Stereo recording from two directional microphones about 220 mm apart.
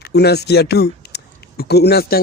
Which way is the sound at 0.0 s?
45° left (ahead or behind).